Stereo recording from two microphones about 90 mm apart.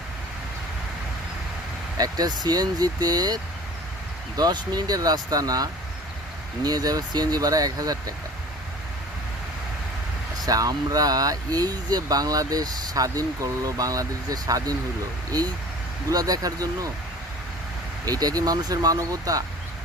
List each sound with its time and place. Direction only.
2.0 s speech: 45° right (ahead or behind)
10.4 s speech: 45° right (ahead or behind)
18.0 s speech: 45° right (ahead or behind)